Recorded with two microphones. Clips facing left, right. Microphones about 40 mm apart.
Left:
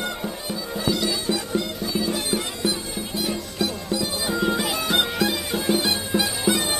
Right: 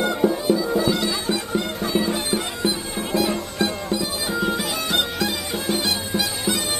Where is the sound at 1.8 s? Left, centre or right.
Right.